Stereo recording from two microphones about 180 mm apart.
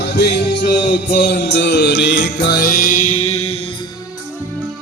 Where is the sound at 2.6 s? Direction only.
50° left (ahead or behind).